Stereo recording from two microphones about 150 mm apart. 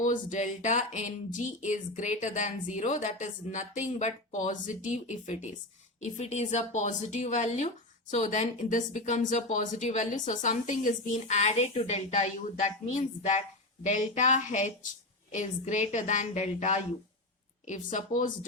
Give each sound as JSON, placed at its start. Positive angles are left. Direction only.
{"t": 0.0, "sound": "speech", "side_deg": 55}